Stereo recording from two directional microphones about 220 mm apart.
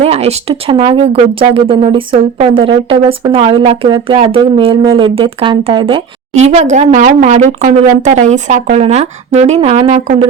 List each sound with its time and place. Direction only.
0.0 s speech: 30° right (ahead or behind)